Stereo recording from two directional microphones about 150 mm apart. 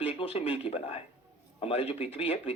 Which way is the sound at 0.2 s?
40° left (ahead or behind).